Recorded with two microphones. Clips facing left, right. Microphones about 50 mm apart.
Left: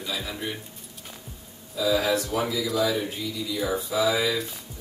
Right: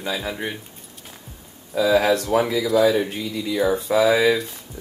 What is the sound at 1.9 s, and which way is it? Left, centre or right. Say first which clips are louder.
Speech: right 6 dB; right.